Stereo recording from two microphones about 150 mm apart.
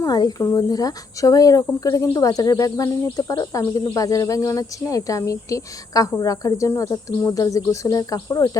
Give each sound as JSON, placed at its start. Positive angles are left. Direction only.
{"t": 0.0, "sound": "a woman's voice", "side_deg": 25}